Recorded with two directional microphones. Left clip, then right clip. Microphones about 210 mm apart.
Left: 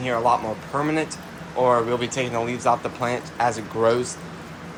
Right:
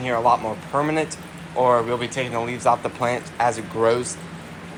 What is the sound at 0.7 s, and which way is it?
A man's voice, centre (ahead or behind).